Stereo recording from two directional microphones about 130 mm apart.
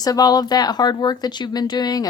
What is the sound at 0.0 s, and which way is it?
Speech, 30° left (ahead or behind).